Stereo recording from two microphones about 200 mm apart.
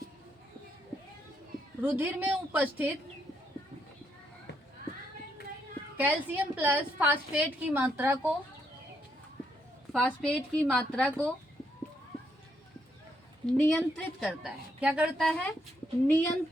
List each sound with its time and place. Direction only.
1.8 s a woman's voice: 10° right (ahead or behind)
6.0 s a woman's voice: 10° right (ahead or behind)
9.9 s a woman's voice: 5° left (ahead or behind)
10.7 s a woman's voice: 5° right (ahead or behind)
13.6 s a woman's voice: 10° left (ahead or behind)
14.2 s a woman's voice: 5° right (ahead or behind)
15.3 s a woman's voice: 5° left (ahead or behind)